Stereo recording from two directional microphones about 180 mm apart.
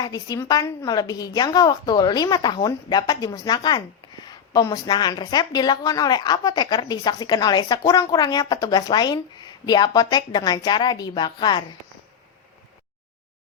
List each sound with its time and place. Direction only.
0.0 s a woman's voice: 20° left (ahead or behind)